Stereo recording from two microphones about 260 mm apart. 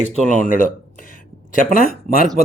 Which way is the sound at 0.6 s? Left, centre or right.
Left.